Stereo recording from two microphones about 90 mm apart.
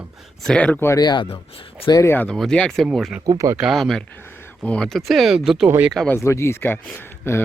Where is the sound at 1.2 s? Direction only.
90° left.